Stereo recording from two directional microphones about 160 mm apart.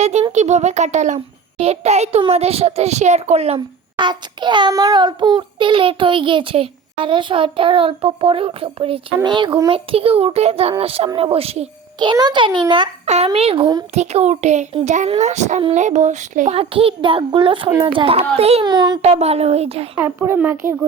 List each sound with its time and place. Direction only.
0.0 s a child's voice: 45° right (ahead or behind)
11.9 s a child's voice: 30° right (ahead or behind)
13.1 s a child's voice: 40° right (ahead or behind)
13.9 s a child's voice: 45° right (ahead or behind)
18.6 s a child's voice: 25° right (ahead or behind)
19.0 s a child's voice: 40° right (ahead or behind)
20.0 s speech: 15° right (ahead or behind)